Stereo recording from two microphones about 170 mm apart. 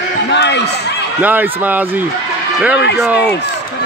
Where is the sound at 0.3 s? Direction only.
90° left.